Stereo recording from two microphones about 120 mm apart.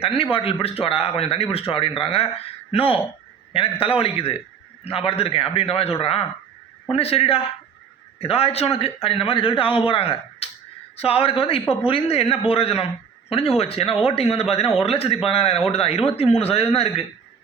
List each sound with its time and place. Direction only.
0.0 s a man's voice: 50° left (ahead or behind)